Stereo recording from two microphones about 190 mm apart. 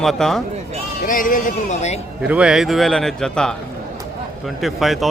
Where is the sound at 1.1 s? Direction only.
45° left (ahead or behind).